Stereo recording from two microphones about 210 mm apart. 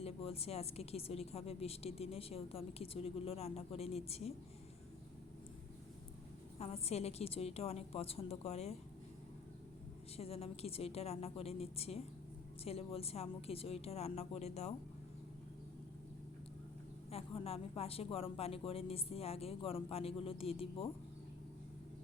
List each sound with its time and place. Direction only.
0.0 s a woman's voice: 30° left (ahead or behind)
6.6 s a woman's voice: 30° left (ahead or behind)
10.2 s a woman's voice: 30° left (ahead or behind)
17.1 s a woman's voice: 30° left (ahead or behind)